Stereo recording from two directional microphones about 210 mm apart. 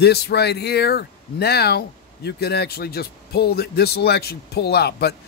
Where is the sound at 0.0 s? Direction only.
50° left (ahead or behind).